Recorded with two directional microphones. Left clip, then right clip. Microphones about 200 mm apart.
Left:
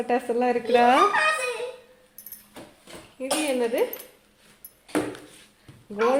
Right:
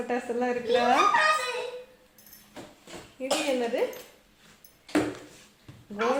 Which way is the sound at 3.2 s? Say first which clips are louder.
Left 1 dB; 55° left (ahead or behind).